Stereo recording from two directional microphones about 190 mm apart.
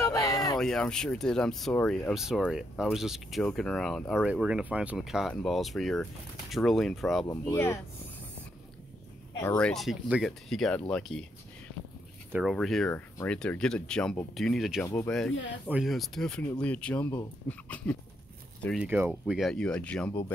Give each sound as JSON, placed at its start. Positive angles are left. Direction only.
{"t": 0.0, "sound": "a sound", "side_deg": 15}
{"t": 0.6, "sound": "speech", "side_deg": 5}
{"t": 7.2, "sound": "speech", "side_deg": 15}
{"t": 9.4, "sound": "speech", "side_deg": 10}
{"t": 12.3, "sound": "speech", "side_deg": -5}
{"t": 18.9, "sound": "speech", "side_deg": -10}